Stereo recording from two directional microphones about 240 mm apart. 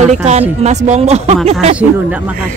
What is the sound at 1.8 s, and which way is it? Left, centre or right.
Speech, centre.